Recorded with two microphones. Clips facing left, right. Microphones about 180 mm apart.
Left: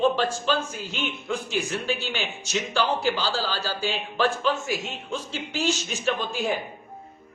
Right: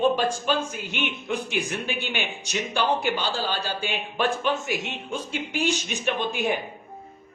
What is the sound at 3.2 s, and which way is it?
Speech, 20° right (ahead or behind).